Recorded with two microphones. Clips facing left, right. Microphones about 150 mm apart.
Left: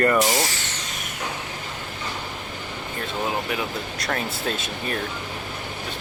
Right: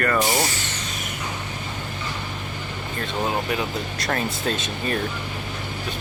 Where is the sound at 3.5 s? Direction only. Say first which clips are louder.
Right 2 dB; centre (ahead or behind).